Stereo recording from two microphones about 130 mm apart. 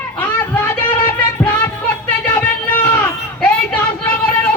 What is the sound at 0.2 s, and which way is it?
Music, 15° left (ahead or behind).